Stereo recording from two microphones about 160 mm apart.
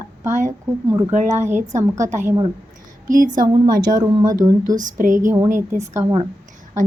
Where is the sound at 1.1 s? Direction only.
50° right (ahead or behind).